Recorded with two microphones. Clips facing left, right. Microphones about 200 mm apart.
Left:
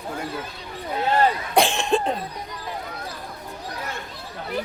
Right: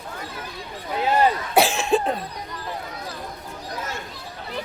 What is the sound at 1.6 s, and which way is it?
Cough, centre (ahead or behind).